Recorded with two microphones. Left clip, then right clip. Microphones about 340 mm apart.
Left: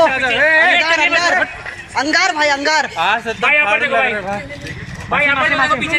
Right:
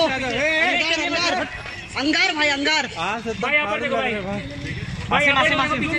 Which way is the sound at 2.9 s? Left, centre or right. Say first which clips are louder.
Left 9 dB; left.